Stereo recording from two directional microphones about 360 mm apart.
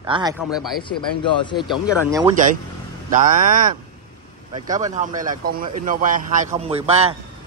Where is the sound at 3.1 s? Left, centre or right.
Right.